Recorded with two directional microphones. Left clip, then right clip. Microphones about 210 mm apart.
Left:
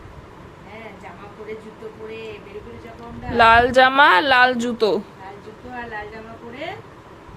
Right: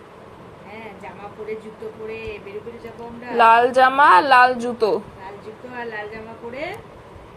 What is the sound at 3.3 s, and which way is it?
A woman's voice, 20° left (ahead or behind).